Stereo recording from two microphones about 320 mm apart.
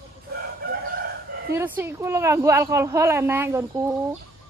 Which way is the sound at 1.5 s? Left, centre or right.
Centre.